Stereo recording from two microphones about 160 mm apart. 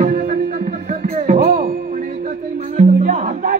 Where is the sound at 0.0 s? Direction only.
70° right (ahead or behind).